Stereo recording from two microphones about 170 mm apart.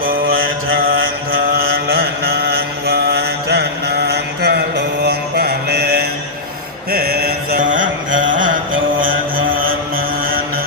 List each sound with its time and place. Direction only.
0.0 s mantra: 60° right (ahead or behind)